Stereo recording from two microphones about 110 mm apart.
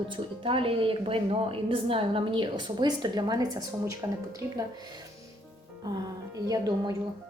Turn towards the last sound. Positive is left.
turn(degrees=-35)  # may be behind; listen again after turning